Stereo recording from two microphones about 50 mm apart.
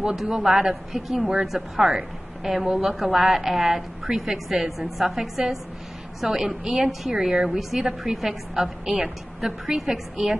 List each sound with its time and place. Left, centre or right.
0.3 s a woman's voice: centre
7.1 s a woman's voice: centre